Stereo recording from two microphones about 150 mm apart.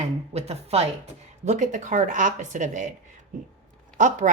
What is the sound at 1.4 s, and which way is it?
Speech, 55° right (ahead or behind).